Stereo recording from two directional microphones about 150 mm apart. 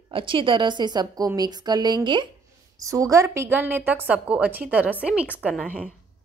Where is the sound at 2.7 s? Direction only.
20° right (ahead or behind).